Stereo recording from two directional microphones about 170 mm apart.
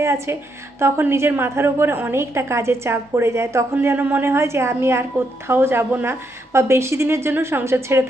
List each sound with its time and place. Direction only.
0.0 s a woman's voice: 15° right (ahead or behind)